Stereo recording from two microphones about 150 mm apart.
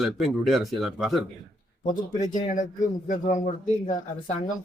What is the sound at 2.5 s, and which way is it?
A man's voice, 60° left (ahead or behind).